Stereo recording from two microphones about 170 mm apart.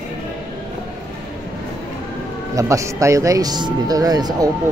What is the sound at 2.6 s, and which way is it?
Speech, 20° right (ahead or behind).